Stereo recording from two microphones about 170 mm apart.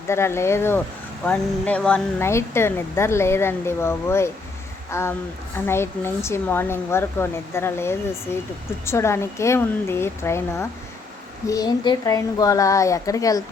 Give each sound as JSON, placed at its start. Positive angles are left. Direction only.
{"t": 0.1, "sound": "a woman's voice", "side_deg": 15}